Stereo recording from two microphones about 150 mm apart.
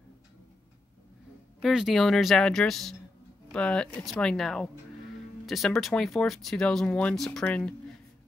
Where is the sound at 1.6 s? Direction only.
Centre (ahead or behind).